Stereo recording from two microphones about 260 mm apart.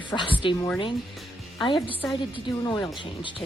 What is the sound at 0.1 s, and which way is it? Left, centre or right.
Speech, centre.